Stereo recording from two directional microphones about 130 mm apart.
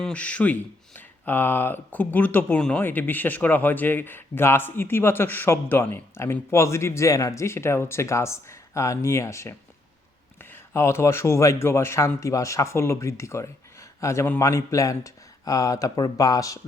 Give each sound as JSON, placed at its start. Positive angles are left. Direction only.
{"t": 0.0, "sound": "speech", "side_deg": 10}